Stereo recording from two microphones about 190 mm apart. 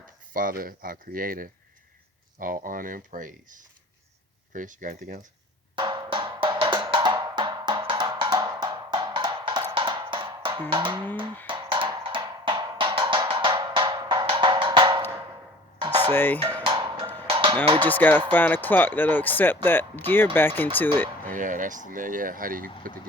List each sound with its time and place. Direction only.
0.3 s speech: 45° right (ahead or behind)
5.7 s music: 25° right (ahead or behind)
10.7 s speech: 25° right (ahead or behind)
11.4 s music: 25° right (ahead or behind)
15.9 s stir: 35° right (ahead or behind)
16.1 s speech: 10° left (ahead or behind)
16.6 s music: 25° right (ahead or behind)
17.2 s cowbell: 30° right (ahead or behind)
17.8 s speech: 10° left (ahead or behind)
21.2 s speech: 45° right (ahead or behind)